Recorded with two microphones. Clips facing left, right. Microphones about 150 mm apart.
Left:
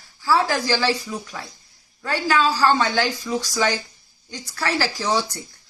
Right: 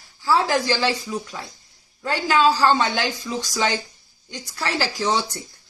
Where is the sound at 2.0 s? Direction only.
20° right (ahead or behind).